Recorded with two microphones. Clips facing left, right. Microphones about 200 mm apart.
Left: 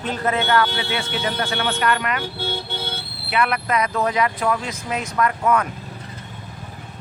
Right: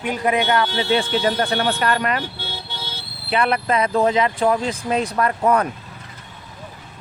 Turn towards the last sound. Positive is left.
turn(degrees=-35)  # may be behind; listen again after turning